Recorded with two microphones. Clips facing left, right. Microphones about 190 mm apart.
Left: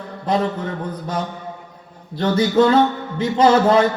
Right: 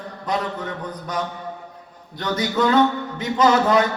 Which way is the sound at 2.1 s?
30° left (ahead or behind).